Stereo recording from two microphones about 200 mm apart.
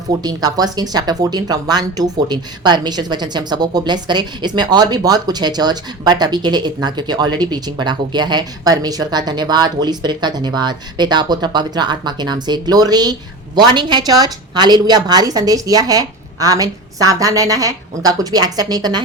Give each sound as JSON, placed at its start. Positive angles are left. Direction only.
{"t": 0.1, "sound": "speech", "side_deg": -20}